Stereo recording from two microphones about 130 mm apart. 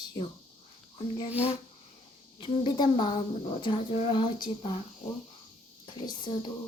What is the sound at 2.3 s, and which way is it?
Speech, 40° left (ahead or behind).